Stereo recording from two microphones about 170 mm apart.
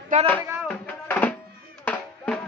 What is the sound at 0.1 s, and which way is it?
Speech, 50° right (ahead or behind).